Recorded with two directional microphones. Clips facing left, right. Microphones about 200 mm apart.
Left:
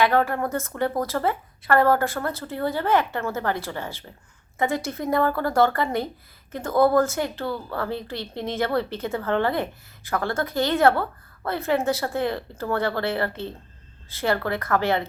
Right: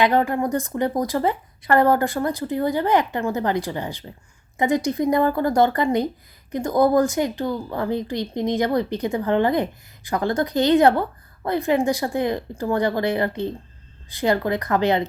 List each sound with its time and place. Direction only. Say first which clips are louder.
0.0 s a woman's voice: right 2 dB; 15° right (ahead or behind)